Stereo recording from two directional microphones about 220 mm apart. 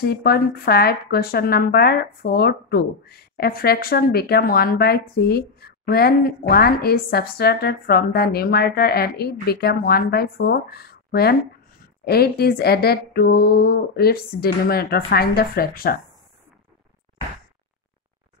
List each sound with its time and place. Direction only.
0.0 s speech: 45° left (ahead or behind)